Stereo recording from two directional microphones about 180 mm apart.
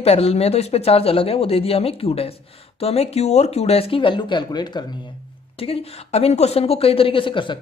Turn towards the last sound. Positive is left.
turn(degrees=30)  # may be behind; listen again after turning